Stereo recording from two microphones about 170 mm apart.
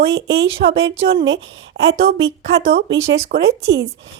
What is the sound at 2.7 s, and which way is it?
Speech, 70° right (ahead or behind).